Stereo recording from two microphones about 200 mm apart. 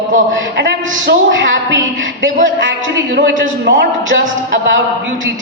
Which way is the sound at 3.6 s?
65° right (ahead or behind).